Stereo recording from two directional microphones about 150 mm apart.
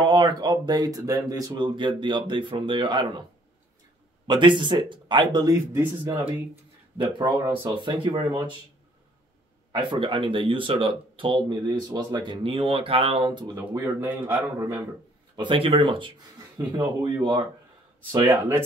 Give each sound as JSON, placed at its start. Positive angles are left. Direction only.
{"t": 0.0, "sound": "speech", "side_deg": -30}
{"t": 4.3, "sound": "speech", "side_deg": -30}
{"t": 7.6, "sound": "speech", "side_deg": -30}
{"t": 9.7, "sound": "speech", "side_deg": -30}
{"t": 15.3, "sound": "speech", "side_deg": -35}